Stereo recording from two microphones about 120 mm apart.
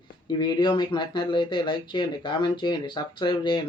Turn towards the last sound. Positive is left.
turn(degrees=40)  # may be behind; listen again after turning